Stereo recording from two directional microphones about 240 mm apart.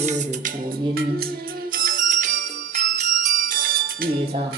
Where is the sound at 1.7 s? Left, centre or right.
Right.